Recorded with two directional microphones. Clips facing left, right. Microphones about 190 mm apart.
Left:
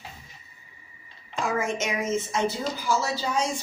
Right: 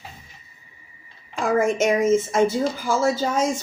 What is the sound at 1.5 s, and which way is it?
Speech, 50° right (ahead or behind).